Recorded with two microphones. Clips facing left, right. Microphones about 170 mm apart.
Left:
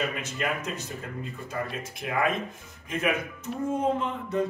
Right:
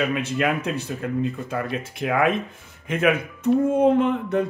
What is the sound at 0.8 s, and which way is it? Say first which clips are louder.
Speech: right 11 dB; 65° right (ahead or behind).